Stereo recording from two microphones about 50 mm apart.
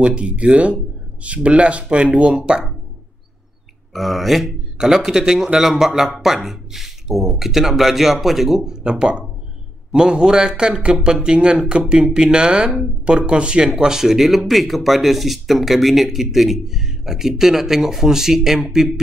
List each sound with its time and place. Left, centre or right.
0.0 s speech: right
3.9 s a man's voice: centre